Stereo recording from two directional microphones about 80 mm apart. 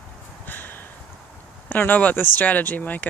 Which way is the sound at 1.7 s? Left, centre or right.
Left.